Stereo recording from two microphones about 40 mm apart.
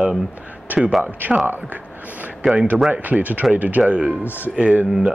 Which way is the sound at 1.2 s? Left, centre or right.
Right.